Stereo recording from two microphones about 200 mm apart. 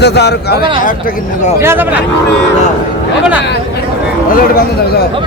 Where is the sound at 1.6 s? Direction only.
10° right (ahead or behind).